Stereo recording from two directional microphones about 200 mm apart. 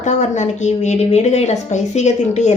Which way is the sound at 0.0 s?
35° left (ahead or behind).